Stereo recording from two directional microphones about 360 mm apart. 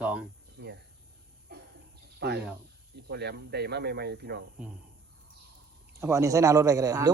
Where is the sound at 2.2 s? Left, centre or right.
Right.